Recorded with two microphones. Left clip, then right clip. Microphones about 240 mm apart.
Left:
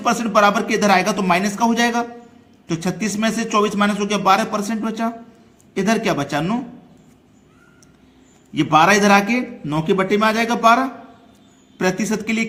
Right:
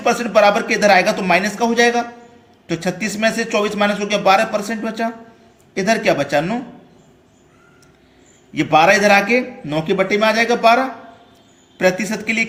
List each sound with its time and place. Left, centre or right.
0.0 s a man's voice: left
8.5 s a man's voice: left